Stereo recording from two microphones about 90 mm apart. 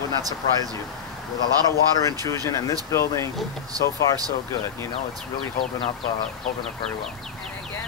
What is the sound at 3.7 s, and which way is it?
Speech, 45° right (ahead or behind).